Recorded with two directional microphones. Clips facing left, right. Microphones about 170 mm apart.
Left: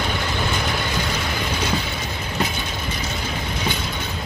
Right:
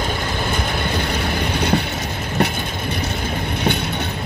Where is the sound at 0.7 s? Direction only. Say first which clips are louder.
Right 2 dB; 55° right (ahead or behind).